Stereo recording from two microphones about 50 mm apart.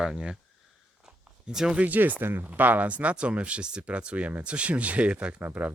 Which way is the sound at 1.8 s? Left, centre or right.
Right.